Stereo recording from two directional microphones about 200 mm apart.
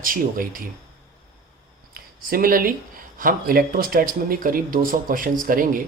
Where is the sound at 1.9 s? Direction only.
45° right (ahead or behind).